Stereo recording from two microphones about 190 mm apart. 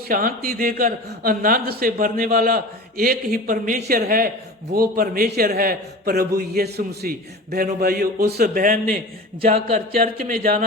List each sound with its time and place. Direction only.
0.1 s a man's voice: 50° right (ahead or behind)